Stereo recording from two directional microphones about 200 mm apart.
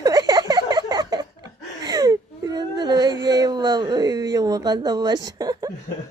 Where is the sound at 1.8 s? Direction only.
20° right (ahead or behind).